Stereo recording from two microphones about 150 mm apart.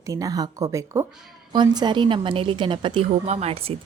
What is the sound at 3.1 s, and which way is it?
Speech, 45° right (ahead or behind).